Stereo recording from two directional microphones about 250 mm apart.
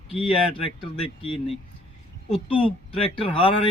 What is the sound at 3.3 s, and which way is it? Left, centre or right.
Speech, left.